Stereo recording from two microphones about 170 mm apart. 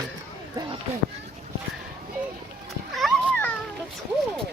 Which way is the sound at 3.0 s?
Centre (ahead or behind).